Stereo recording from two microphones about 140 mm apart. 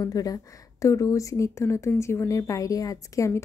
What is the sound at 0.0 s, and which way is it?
A woman's voice, 25° left (ahead or behind).